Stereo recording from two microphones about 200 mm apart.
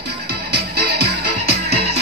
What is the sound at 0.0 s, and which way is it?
Music, 55° right (ahead or behind).